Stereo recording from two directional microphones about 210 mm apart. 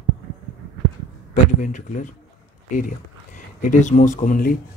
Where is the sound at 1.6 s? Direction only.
40° left (ahead or behind).